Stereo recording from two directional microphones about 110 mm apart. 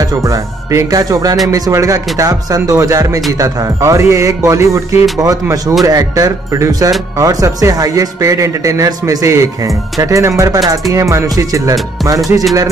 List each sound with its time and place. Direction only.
0.0 s a man's voice: 30° right (ahead or behind)